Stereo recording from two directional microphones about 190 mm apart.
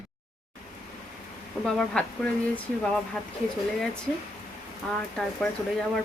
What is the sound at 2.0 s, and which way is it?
Speech, 5° left (ahead or behind).